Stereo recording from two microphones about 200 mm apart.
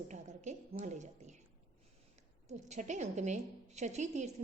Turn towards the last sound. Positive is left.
turn(degrees=-35)  # may be behind; listen again after turning